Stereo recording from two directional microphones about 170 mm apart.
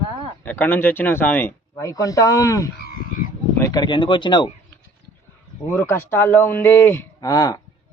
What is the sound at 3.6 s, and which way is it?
Speech, 25° left (ahead or behind).